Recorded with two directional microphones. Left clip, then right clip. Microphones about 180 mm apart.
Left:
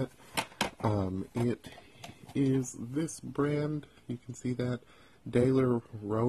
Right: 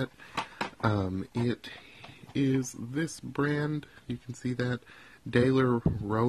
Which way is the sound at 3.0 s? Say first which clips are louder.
Right 1 dB; 10° right (ahead or behind).